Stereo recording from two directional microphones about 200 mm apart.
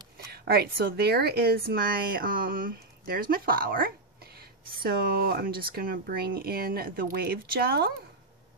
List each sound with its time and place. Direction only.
0.3 s a woman's voice: 50° right (ahead or behind)